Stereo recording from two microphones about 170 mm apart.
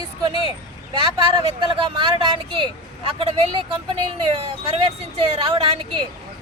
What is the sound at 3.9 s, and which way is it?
Speech, 30° right (ahead or behind).